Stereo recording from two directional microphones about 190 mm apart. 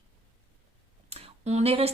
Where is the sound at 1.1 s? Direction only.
35° right (ahead or behind).